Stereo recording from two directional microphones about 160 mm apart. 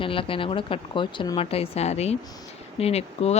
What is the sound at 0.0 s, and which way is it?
A woman's voice, 35° left (ahead or behind).